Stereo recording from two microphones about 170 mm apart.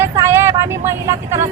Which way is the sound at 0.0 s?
15° right (ahead or behind).